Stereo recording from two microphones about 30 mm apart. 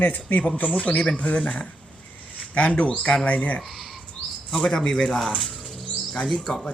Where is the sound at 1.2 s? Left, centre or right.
Left.